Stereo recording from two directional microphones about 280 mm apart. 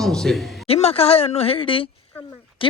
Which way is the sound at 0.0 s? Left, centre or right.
Centre.